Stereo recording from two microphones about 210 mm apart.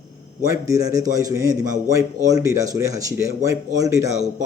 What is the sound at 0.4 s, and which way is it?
A man's voice, 15° right (ahead or behind).